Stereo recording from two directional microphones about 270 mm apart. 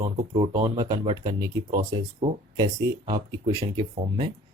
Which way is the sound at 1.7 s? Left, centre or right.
Right.